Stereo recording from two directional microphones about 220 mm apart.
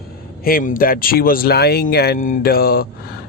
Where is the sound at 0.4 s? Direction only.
40° left (ahead or behind).